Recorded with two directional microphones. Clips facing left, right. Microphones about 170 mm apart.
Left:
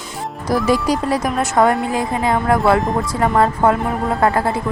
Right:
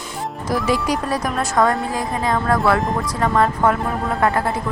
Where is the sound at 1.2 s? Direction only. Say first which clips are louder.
Left 3 dB; centre (ahead or behind).